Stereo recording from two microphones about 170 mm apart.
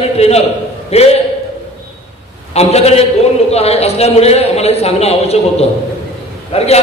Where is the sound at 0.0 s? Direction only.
35° left (ahead or behind).